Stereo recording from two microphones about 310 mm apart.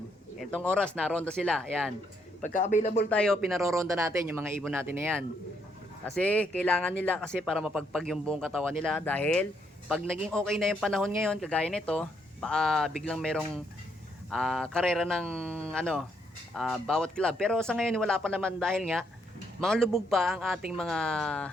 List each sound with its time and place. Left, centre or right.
0.3 s speech: centre
2.4 s speech: left
3.1 s speech: centre
6.1 s speech: centre